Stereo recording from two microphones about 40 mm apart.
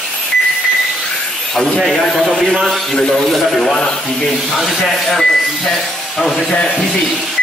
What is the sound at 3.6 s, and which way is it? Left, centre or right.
A man's voice, centre.